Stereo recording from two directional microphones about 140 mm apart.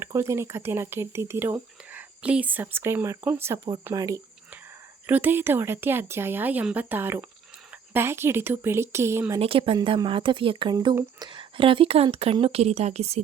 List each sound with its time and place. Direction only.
0.0 s speech: 20° right (ahead or behind)
5.0 s speech: 15° right (ahead or behind)
9.4 s speech: 40° right (ahead or behind)